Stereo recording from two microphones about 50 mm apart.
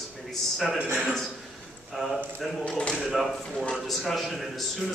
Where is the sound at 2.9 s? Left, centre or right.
Centre.